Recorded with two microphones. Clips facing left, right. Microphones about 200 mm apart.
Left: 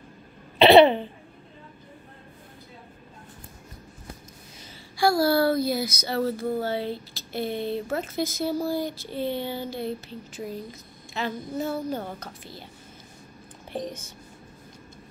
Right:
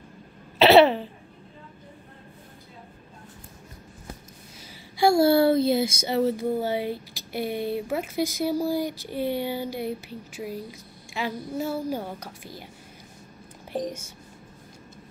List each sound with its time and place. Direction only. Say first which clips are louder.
0.6 s a sound: left 1 dB; 5° right (ahead or behind)
4.9 s speech: right 3 dB; 25° right (ahead or behind)
13.8 s speech: right 3 dB; 10° right (ahead or behind)